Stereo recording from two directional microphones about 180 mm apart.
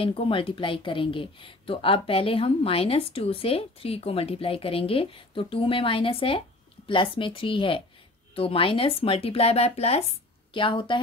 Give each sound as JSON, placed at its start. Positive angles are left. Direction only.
{"t": 0.0, "sound": "a woman's voice", "side_deg": 30}